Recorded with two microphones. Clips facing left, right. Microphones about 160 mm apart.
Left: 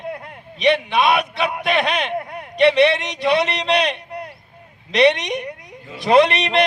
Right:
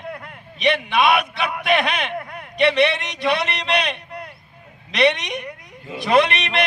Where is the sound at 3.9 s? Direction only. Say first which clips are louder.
Left 3 dB; 30° left (ahead or behind).